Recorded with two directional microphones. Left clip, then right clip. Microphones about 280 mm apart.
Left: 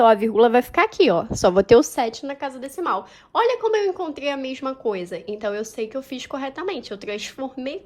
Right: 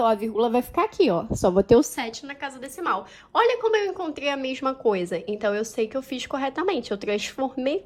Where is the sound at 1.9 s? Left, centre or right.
Centre.